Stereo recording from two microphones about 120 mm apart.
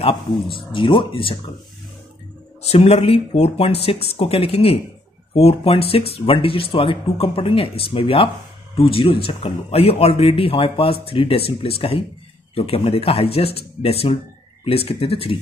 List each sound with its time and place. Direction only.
0.0 s speech: 50° left (ahead or behind)
2.6 s speech: 60° left (ahead or behind)